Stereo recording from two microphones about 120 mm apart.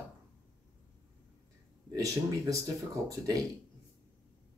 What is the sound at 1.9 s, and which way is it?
Speech, 30° right (ahead or behind).